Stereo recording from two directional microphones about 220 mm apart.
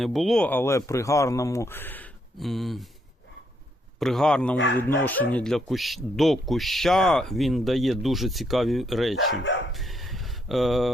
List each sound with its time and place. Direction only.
0.0 s speech: centre (ahead or behind)
4.0 s speech: centre (ahead or behind)
9.1 s speech: 55° left (ahead or behind)
9.7 s a sound: centre (ahead or behind)